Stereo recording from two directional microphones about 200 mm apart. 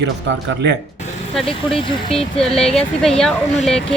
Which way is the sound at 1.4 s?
25° left (ahead or behind).